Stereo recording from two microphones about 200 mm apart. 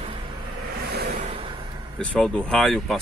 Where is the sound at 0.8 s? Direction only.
50° right (ahead or behind).